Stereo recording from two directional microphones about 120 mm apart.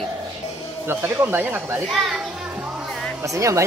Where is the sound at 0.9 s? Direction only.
15° right (ahead or behind).